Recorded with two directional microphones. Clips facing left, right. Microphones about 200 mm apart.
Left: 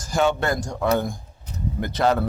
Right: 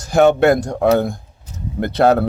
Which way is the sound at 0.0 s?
60° right (ahead or behind).